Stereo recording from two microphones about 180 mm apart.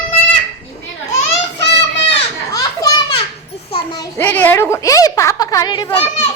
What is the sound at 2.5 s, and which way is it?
Children playing, 20° left (ahead or behind).